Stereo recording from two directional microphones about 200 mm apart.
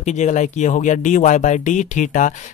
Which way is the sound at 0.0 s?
35° left (ahead or behind).